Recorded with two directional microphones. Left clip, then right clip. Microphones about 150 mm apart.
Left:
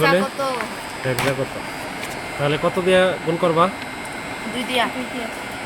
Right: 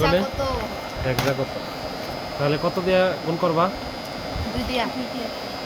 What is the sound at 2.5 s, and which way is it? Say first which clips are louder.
Speech: left 4 dB; 20° left (ahead or behind).